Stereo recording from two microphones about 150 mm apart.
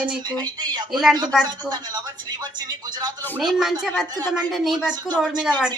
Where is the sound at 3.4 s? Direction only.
Centre (ahead or behind).